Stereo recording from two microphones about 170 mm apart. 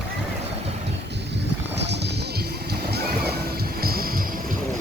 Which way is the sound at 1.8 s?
85° right.